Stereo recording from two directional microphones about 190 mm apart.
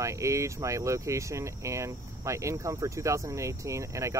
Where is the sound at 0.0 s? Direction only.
15° right (ahead or behind).